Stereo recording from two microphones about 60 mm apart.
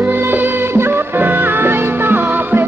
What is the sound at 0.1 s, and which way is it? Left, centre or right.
Music, right.